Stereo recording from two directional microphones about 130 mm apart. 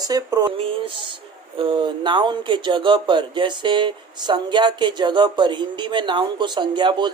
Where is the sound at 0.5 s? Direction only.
45° right (ahead or behind).